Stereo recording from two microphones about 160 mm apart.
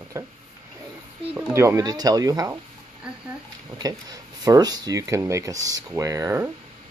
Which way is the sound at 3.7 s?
25° right (ahead or behind).